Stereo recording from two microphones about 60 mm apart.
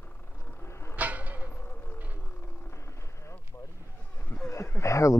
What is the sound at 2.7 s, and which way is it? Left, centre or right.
Vehicle, left.